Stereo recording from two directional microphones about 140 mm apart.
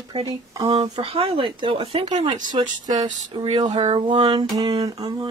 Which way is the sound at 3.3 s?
45° right (ahead or behind).